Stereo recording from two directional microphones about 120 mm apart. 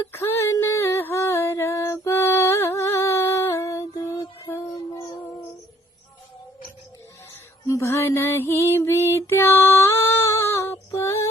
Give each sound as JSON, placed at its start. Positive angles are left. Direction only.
{"t": 0.1, "sound": "music", "side_deg": 20}
{"t": 7.7, "sound": "female singing", "side_deg": 25}